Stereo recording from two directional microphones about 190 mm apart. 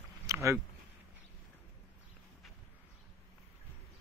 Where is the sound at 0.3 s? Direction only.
15° right (ahead or behind).